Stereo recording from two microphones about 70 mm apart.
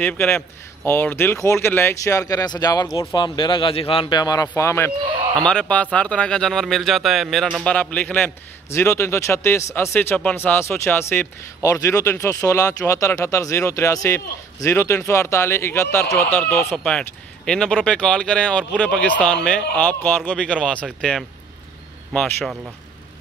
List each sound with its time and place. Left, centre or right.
0.0 s speech: left
2.0 s speech: left
3.2 s speech: left
4.1 s speech: left
4.6 s speech: left
5.5 s speech: centre
7.6 s speech: centre
8.6 s speech: left
10.3 s speech: left
11.6 s speech: left
16.3 s speech: left
16.7 s speech: centre